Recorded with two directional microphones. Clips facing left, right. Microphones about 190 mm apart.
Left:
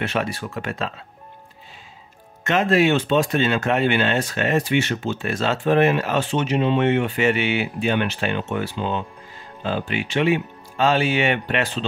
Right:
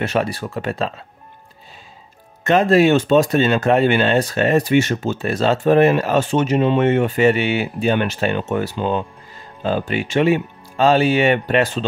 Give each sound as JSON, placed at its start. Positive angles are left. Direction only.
{"t": 0.0, "sound": "speech", "side_deg": -40}
{"t": 2.4, "sound": "speech", "side_deg": -35}